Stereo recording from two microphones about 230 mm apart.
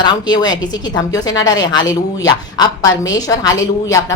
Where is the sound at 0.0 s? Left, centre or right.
Centre.